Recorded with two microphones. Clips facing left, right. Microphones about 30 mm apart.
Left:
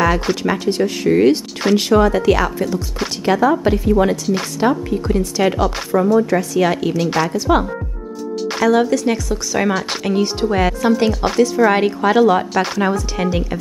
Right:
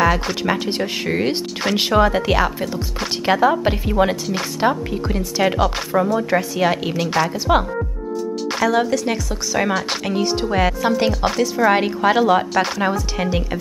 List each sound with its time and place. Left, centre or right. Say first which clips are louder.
0.0 s speech: left 1 dB; centre
0.4 s speech: left 3 dB; right
7.0 s speech: left 1 dB; centre
7.3 s speech: left 2 dB; centre
8.5 s speech: left 4 dB; centre